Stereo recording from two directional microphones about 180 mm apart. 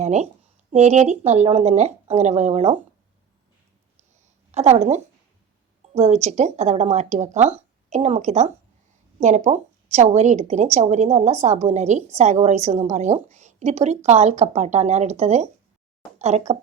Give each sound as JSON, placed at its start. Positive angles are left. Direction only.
{"t": 0.0, "sound": "a woman's voice", "side_deg": -40}
{"t": 4.5, "sound": "a woman's voice", "side_deg": -35}